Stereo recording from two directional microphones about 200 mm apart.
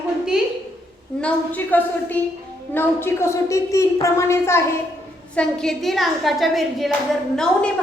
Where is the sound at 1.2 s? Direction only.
10° left (ahead or behind).